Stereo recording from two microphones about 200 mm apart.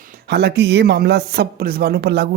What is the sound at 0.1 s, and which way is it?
Speech, 55° right (ahead or behind).